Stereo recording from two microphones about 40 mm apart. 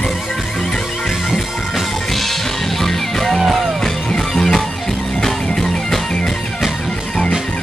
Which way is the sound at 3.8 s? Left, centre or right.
Centre.